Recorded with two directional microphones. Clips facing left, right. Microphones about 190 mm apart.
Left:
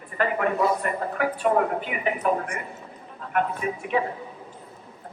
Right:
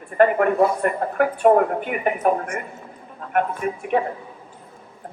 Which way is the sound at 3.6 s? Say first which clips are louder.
Right 3 dB; 50° right (ahead or behind).